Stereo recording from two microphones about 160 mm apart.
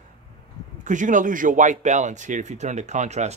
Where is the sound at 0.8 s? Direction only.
50° right (ahead or behind).